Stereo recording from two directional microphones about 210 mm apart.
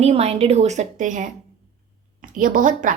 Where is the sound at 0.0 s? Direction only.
30° right (ahead or behind).